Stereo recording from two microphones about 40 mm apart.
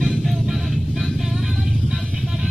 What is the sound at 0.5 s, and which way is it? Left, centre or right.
Vehicle, centre.